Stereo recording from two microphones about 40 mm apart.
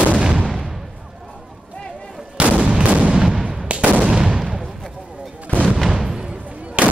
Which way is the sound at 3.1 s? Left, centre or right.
Centre.